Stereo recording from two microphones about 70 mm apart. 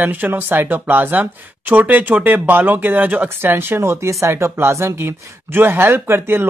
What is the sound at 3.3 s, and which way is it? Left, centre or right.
Speech, right.